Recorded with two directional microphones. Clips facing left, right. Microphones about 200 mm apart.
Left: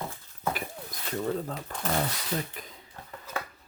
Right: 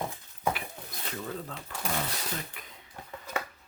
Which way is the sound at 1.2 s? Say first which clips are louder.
Left 10 dB; 40° left (ahead or behind).